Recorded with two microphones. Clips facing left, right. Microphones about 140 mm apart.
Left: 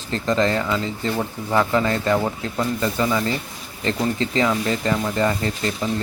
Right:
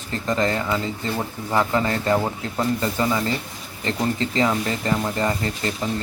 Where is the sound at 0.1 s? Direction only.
20° right (ahead or behind).